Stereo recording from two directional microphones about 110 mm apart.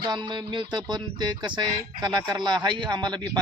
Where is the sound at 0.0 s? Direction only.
40° right (ahead or behind).